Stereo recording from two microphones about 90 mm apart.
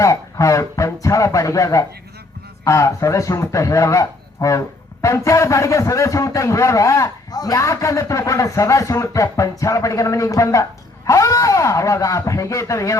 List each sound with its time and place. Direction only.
0.0 s a man's voice: 35° left (ahead or behind)